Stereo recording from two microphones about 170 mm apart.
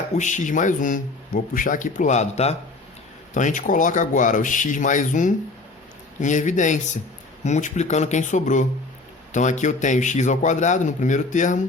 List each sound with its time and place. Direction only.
0.2 s speech: 45° left (ahead or behind)